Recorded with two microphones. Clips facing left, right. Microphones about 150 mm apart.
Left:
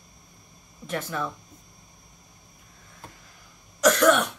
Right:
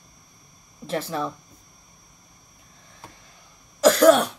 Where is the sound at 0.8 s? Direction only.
30° right (ahead or behind).